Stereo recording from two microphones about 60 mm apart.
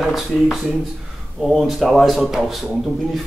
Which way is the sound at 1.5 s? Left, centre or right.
Centre.